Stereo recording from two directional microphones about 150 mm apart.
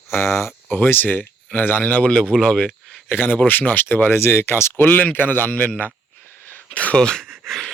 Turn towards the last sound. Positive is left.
turn(degrees=0)  # may be behind; listen again after turning